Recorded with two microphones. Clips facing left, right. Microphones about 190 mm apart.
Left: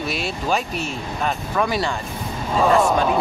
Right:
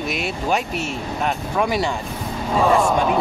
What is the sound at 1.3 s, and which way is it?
Speech, 15° right (ahead or behind).